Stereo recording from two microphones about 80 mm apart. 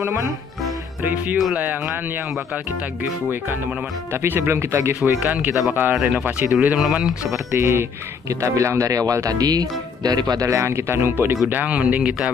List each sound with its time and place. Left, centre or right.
0.0 s speech: right
5.2 s speech: centre
5.9 s speech: centre
7.5 s speech: right; by 12.3 s centre